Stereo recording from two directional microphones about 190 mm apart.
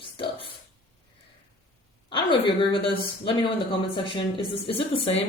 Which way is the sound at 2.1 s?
25° left (ahead or behind).